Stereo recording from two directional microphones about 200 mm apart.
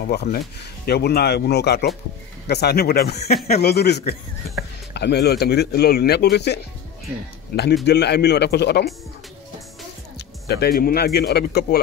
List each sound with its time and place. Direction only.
0.0 s speech: 55° left (ahead or behind)
7.8 s speech: 55° left (ahead or behind)
10.1 s speech: 55° left (ahead or behind)